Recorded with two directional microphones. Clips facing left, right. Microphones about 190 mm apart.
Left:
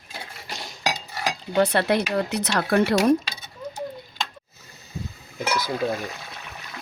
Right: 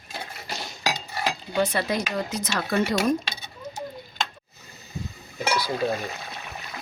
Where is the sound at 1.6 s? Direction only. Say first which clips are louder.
Left 4 dB; 65° left (ahead or behind).